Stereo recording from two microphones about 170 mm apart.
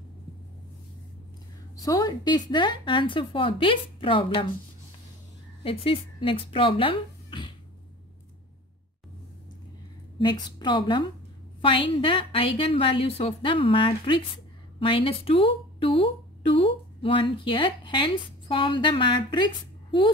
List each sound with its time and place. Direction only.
1.8 s speech: 20° left (ahead or behind)
5.6 s speech: 35° left (ahead or behind)
10.2 s a woman's voice: 25° left (ahead or behind)